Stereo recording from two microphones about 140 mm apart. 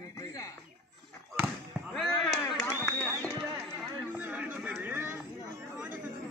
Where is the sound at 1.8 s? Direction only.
Centre (ahead or behind).